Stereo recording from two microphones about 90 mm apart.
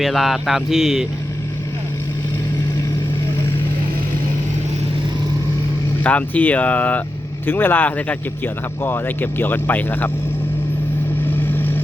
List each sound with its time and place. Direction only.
0.0 s speech: centre (ahead or behind)
6.0 s speech: 15° left (ahead or behind)
11.3 s vehicle: 20° left (ahead or behind)